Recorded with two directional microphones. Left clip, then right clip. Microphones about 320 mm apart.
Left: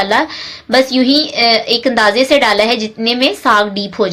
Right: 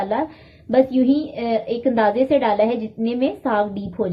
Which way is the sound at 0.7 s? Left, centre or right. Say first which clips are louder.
Left 6 dB; centre.